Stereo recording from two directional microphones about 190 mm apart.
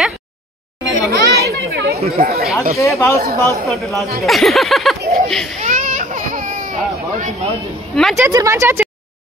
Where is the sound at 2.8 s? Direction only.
15° left (ahead or behind).